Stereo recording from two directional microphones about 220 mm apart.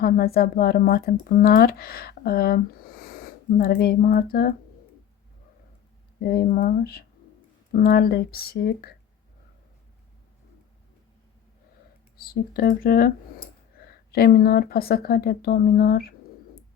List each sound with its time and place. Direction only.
0.0 s speech: 45° left (ahead or behind)
6.1 s speech: 45° left (ahead or behind)
12.1 s speech: 40° left (ahead or behind)